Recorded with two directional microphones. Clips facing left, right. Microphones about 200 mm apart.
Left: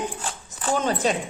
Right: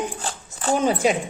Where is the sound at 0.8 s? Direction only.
10° right (ahead or behind).